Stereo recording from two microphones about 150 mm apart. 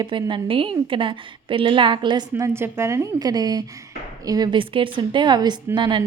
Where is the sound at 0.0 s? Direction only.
30° right (ahead or behind).